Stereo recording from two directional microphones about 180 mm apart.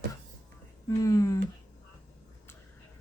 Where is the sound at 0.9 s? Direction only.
20° left (ahead or behind).